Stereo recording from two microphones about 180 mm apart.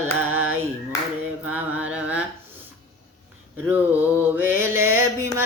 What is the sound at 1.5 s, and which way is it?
Carnatic music, 10° right (ahead or behind).